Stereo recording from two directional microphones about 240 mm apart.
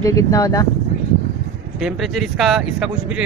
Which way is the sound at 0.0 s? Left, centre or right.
Centre.